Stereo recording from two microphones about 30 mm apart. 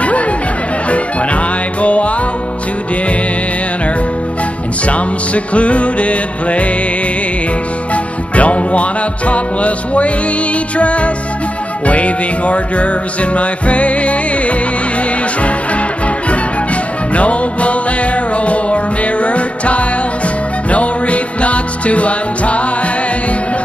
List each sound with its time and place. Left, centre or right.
0.8 s music: left
4.8 s music: left
7.9 s music: left
17.1 s music: left